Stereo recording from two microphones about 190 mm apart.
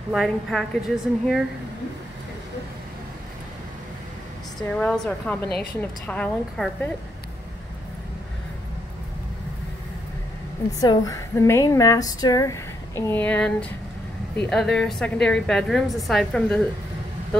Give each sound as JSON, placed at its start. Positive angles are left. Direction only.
{"t": 0.1, "sound": "a woman's voice", "side_deg": 0}
{"t": 4.6, "sound": "a woman's voice", "side_deg": 5}
{"t": 10.8, "sound": "a woman's voice", "side_deg": 20}